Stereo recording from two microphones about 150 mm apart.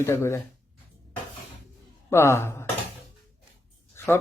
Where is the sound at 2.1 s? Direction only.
15° left (ahead or behind).